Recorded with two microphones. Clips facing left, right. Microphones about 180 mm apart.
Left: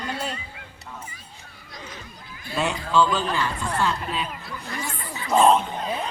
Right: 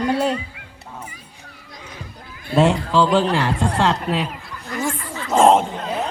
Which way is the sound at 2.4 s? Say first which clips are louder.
Right 10 dB; 80° right.